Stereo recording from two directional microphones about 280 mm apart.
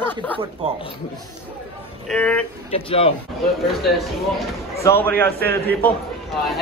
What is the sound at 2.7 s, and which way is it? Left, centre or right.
Speech, centre.